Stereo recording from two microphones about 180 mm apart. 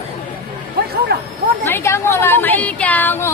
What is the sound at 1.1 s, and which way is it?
Speech, 60° right (ahead or behind).